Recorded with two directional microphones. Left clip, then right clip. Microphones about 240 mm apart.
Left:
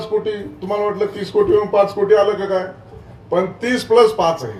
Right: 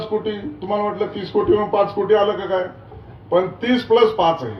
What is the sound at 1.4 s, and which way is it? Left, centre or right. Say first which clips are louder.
Speech: left 2 dB; right.